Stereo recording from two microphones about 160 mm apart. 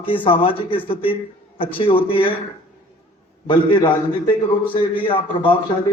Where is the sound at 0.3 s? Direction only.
35° left (ahead or behind).